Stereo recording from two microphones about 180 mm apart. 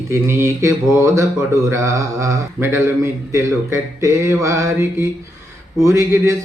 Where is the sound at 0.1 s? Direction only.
15° right (ahead or behind).